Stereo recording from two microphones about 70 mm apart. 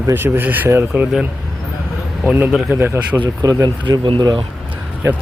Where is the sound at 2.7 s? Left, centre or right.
Right.